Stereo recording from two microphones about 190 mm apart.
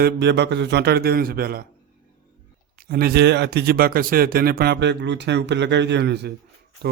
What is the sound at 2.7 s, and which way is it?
Speech, 50° right (ahead or behind).